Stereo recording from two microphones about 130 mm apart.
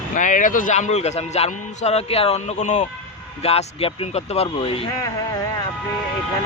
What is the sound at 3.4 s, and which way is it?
Speech, 50° left (ahead or behind).